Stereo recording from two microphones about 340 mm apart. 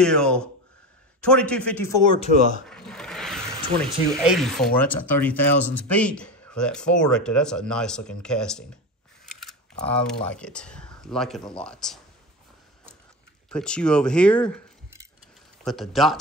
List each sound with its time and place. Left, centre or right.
0.0 s speech: centre
2.6 s speech: centre
13.5 s speech: centre
15.6 s speech: centre